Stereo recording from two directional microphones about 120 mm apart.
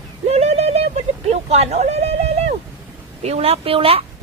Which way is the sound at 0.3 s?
65° right (ahead or behind).